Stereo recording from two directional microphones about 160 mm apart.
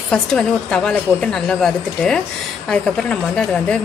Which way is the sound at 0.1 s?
5° left (ahead or behind).